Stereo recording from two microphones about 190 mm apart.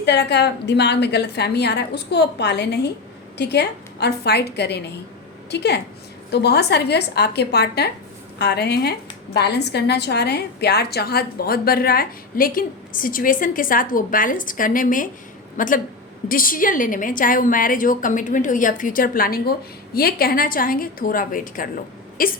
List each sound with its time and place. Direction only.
0.0 s a woman's voice: 60° left (ahead or behind)